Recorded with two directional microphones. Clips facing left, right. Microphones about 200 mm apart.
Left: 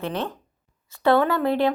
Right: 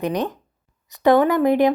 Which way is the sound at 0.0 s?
15° right (ahead or behind).